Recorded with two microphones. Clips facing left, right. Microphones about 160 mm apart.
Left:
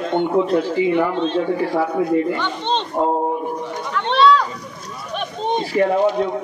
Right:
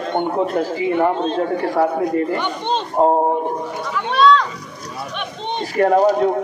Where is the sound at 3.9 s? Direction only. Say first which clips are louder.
Left 1 dB; 5° right (ahead or behind).